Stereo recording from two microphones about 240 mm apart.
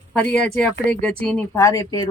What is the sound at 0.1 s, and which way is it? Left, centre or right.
Speech, centre.